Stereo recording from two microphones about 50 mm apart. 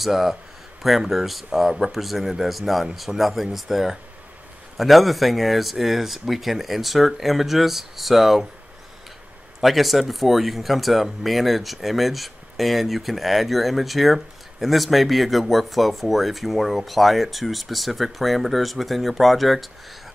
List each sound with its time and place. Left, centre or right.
0.0 s speech: centre
9.6 s speech: centre